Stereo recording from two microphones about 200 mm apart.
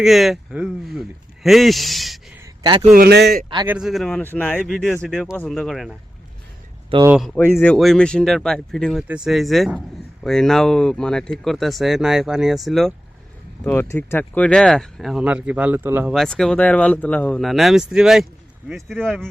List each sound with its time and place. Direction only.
0.0 s speech: centre (ahead or behind)
2.6 s a man's voice: 25° right (ahead or behind)
2.9 s speech: 50° right (ahead or behind)
3.7 s speech: centre (ahead or behind)
6.9 s a man's voice: 25° right (ahead or behind)
7.6 s speech: 5° left (ahead or behind)
13.7 s speech: 10° left (ahead or behind); by 16.1 s 10° right (ahead or behind)
16.1 s speech: centre (ahead or behind)